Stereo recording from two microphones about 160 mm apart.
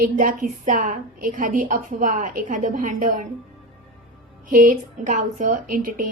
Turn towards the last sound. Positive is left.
turn(degrees=-60)  # may be behind; listen again after turning